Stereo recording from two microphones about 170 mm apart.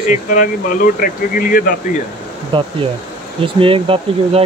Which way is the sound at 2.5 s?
30° right (ahead or behind).